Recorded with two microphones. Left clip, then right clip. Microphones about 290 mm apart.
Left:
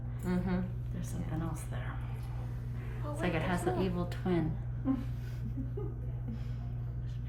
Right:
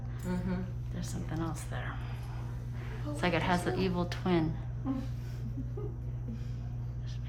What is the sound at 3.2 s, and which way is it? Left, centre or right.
Speech, right.